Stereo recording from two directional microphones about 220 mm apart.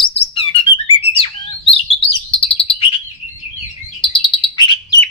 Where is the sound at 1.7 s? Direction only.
25° left (ahead or behind).